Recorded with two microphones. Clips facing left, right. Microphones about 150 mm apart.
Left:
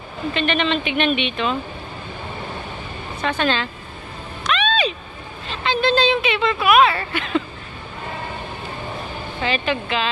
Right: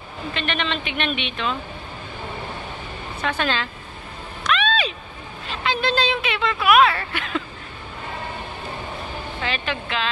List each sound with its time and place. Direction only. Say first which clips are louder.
0.3 s speech: left 6 dB; centre (ahead or behind)
3.3 s speech: left 3 dB; 5° right (ahead or behind)
4.5 s a sound: left 2 dB; centre (ahead or behind)
5.5 s speech: left 4 dB; 5° right (ahead or behind)
9.4 s speech: left 6 dB; 5° left (ahead or behind)